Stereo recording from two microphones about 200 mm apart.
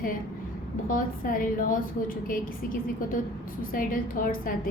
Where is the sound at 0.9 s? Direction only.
45° left (ahead or behind).